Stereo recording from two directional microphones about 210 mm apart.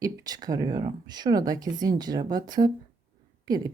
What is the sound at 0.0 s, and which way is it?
Speech, 20° right (ahead or behind).